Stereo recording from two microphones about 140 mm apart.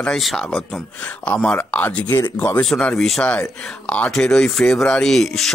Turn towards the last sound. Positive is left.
turn(degrees=0)  # may be behind; listen again after turning